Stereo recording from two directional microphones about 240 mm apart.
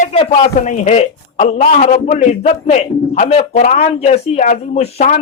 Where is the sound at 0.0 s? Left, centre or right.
Left.